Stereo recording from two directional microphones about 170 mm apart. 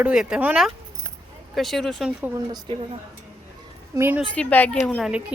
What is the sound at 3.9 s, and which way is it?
Speech, 15° right (ahead or behind).